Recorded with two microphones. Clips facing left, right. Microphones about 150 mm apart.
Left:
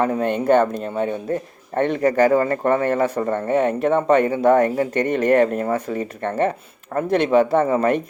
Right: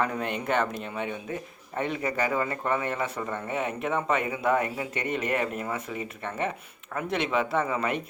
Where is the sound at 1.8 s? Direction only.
55° left (ahead or behind).